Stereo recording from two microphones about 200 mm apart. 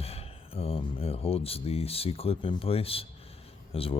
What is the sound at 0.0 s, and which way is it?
Speech, 30° left (ahead or behind).